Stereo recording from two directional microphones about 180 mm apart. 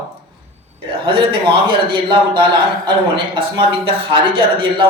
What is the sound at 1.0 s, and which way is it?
A man's voice, 25° right (ahead or behind).